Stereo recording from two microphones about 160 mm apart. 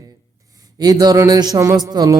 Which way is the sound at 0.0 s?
20° right (ahead or behind).